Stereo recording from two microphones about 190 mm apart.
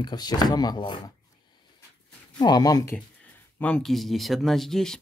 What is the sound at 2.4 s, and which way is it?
Speech, 20° left (ahead or behind).